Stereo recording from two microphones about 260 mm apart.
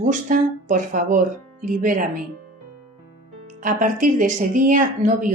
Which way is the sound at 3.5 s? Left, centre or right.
Right.